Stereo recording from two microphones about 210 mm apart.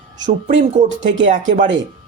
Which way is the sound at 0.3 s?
35° right (ahead or behind).